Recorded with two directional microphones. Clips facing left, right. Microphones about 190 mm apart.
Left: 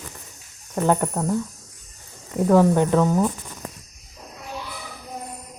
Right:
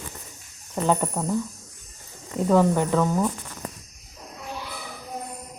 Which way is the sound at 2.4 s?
15° left (ahead or behind).